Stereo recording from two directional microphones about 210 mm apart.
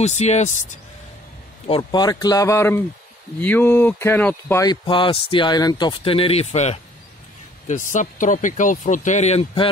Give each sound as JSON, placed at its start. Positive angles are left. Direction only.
{"t": 0.0, "sound": "speech", "side_deg": 30}
{"t": 1.7, "sound": "speech", "side_deg": 20}